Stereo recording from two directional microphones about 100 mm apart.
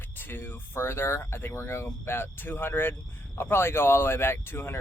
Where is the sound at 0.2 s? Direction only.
20° left (ahead or behind).